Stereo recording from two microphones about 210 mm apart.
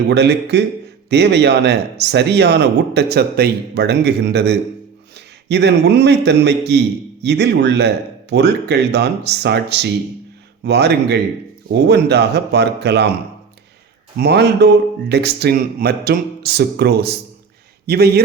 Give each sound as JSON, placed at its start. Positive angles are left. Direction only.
{"t": 0.1, "sound": "a man's voice", "side_deg": -55}
{"t": 14.2, "sound": "a man's voice", "side_deg": -50}